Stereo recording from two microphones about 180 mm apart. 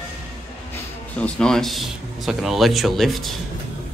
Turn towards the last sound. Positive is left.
turn(degrees=0)  # may be behind; listen again after turning